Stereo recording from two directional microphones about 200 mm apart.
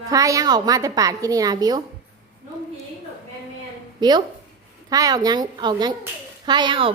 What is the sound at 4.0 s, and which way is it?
A woman's voice, 20° right (ahead or behind).